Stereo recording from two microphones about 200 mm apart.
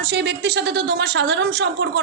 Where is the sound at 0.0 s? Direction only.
60° right (ahead or behind).